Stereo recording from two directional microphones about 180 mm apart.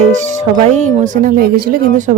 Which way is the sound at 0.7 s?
40° right (ahead or behind).